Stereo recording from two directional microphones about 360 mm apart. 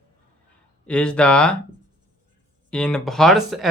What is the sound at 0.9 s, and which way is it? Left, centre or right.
Speech, centre.